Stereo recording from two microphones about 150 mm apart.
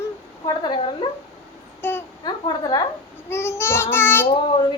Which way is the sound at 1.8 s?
15° left (ahead or behind).